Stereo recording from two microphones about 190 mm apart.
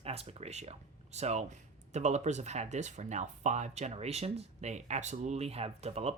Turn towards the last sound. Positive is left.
turn(degrees=-35)  # may be behind; listen again after turning